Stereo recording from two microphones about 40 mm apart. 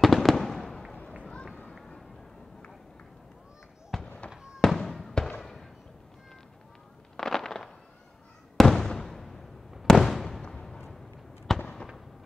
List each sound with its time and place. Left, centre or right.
0.0 s fireworks: centre
1.5 s run: left
3.9 s fireworks: centre
7.2 s fireworks: centre
8.5 s a sound: centre
9.8 s fireworks: centre
10.5 s a sound: centre
11.5 s fireworks: centre